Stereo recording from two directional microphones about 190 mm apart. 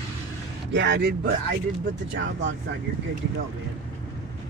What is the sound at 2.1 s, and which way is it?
Speech, 75° right (ahead or behind).